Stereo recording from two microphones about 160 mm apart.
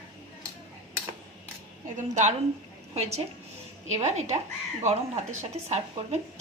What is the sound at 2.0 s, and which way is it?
A woman's voice, 50° right (ahead or behind).